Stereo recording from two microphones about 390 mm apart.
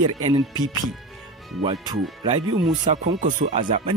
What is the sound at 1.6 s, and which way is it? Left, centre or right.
Speech, centre.